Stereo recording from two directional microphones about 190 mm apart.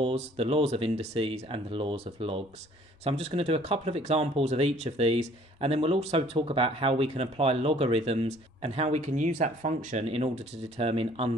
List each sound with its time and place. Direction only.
0.0 s speech: 30° right (ahead or behind)